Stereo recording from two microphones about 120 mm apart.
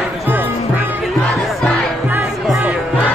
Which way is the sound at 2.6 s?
10° right (ahead or behind).